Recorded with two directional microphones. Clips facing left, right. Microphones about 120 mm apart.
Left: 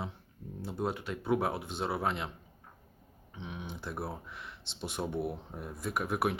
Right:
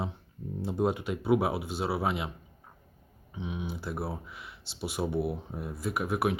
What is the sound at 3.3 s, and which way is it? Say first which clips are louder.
Speech: right 6 dB; 10° right (ahead or behind).